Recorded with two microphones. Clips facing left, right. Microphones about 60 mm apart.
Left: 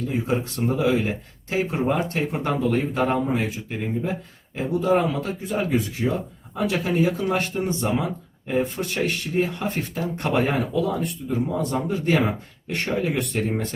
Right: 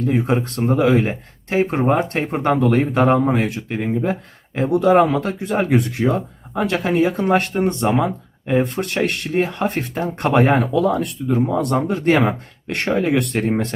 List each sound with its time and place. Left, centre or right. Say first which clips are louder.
0.0 s speech: right 6 dB; right